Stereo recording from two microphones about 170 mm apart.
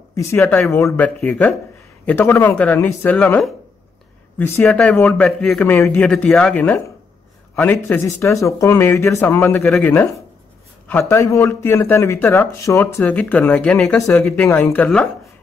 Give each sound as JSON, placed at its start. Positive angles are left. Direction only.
{"t": 0.1, "sound": "speech", "side_deg": 15}
{"t": 4.6, "sound": "speech", "side_deg": 0}